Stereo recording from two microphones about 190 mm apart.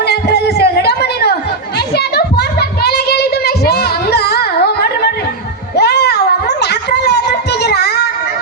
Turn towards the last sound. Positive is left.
turn(degrees=60)  # may be behind; listen again after turning